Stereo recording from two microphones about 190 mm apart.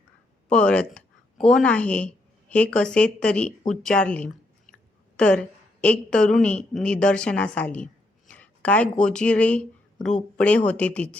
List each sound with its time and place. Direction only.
0.4 s a woman's voice: 5° left (ahead or behind)